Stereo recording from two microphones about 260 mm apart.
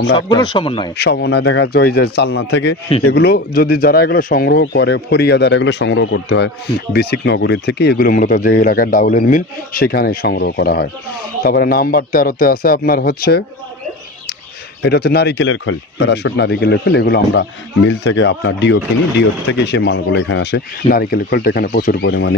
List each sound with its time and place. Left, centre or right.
0.3 s speech: centre
0.9 s speech: left
14.8 s speech: left